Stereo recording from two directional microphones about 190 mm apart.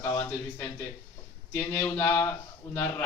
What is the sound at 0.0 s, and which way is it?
A man's voice, 10° left (ahead or behind).